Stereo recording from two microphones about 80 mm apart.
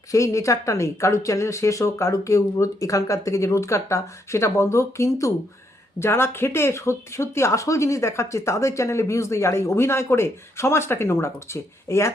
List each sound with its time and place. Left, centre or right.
0.1 s speech: left